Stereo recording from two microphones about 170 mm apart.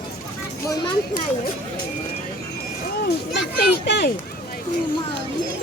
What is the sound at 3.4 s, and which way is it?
Speech, 85° left.